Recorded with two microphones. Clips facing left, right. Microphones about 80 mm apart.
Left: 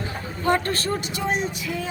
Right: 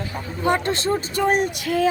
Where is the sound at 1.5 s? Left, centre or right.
Right.